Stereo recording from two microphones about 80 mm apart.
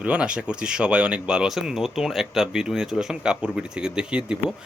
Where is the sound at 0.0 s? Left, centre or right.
Centre.